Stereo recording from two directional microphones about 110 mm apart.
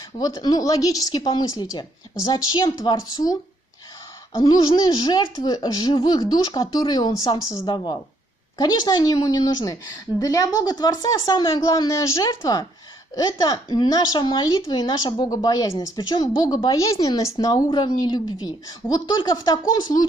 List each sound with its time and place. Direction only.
0.2 s a woman's voice: 35° left (ahead or behind)
4.5 s a woman's voice: 40° left (ahead or behind)
7.6 s a woman's voice: 40° left (ahead or behind)